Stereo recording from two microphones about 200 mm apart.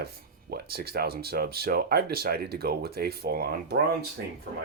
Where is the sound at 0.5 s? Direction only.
50° right (ahead or behind).